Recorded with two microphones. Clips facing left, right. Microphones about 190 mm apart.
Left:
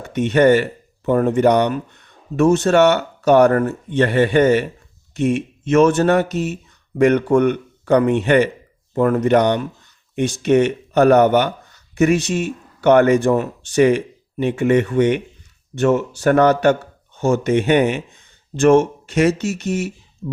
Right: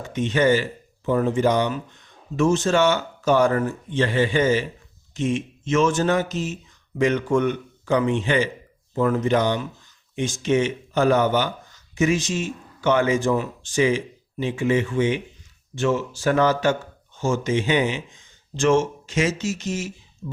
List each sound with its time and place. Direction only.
0.0 s speech: 65° left (ahead or behind)